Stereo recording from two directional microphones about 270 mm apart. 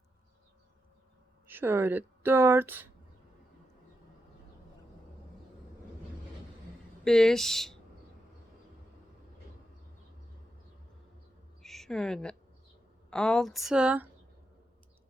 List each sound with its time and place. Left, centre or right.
1.5 s speech: centre
7.0 s a woman's voice: centre
11.6 s a sound: centre
13.1 s a woman's voice: centre